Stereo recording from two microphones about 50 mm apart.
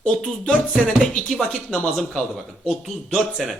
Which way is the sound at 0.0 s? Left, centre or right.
Centre.